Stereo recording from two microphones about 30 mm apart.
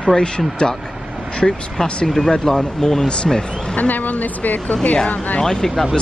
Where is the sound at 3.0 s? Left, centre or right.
Left.